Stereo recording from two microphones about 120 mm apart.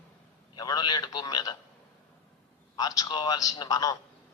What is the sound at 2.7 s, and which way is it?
A man's voice, 30° left (ahead or behind).